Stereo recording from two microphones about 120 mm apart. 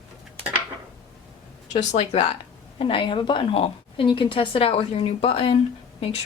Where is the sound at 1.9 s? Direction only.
60° left (ahead or behind).